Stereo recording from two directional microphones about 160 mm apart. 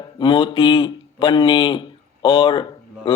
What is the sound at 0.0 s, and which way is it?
Speech, 30° left (ahead or behind).